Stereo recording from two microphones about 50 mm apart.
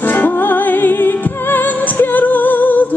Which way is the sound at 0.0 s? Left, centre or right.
Left.